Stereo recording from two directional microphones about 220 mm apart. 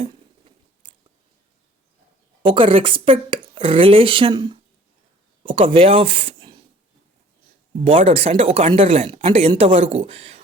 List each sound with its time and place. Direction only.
2.4 s speech: 20° right (ahead or behind)
7.9 s speech: 25° right (ahead or behind)